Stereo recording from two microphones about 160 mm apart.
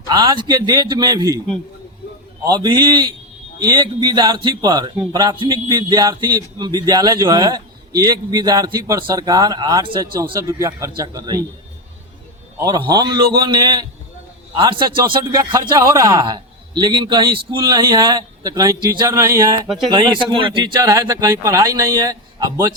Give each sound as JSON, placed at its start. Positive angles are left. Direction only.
{"t": 0.1, "sound": "a man's voice", "side_deg": -25}
{"t": 2.4, "sound": "a man's voice", "side_deg": -25}
{"t": 12.5, "sound": "a man's voice", "side_deg": -25}
{"t": 19.9, "sound": "a man's voice", "side_deg": -30}